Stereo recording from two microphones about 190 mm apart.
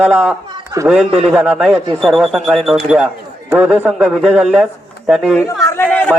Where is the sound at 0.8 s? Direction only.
5° right (ahead or behind).